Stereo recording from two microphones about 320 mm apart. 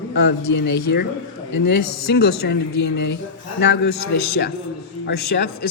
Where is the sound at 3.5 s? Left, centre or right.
Left.